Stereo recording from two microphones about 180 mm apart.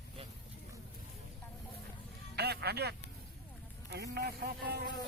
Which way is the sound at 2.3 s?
65° right (ahead or behind).